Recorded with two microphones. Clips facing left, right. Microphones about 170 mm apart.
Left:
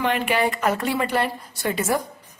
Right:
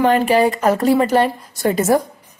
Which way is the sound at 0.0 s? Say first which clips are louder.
Right 8 dB; 40° right (ahead or behind).